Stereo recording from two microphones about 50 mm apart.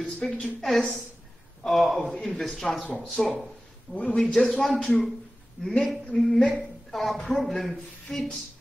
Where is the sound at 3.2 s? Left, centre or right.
Centre.